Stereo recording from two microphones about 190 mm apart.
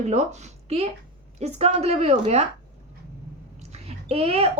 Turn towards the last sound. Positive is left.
turn(degrees=-30)  # may be behind; listen again after turning